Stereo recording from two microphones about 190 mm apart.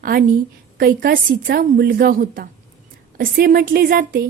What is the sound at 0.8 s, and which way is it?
A woman's voice, 50° right (ahead or behind).